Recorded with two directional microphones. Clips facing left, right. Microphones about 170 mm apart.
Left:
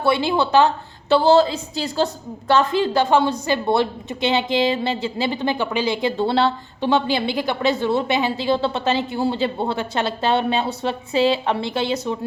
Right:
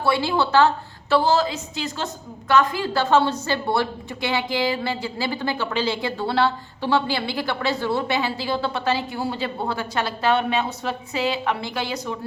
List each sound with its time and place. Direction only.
0.0 s a woman's voice: 20° left (ahead or behind)
1.1 s a woman's voice: 30° left (ahead or behind)